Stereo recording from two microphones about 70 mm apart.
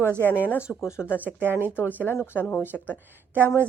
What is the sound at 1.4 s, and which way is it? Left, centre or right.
Speech, right.